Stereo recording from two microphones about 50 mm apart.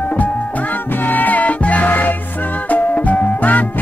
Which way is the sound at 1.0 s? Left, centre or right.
Left.